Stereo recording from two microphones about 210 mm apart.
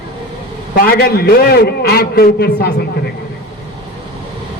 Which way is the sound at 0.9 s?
50° left (ahead or behind).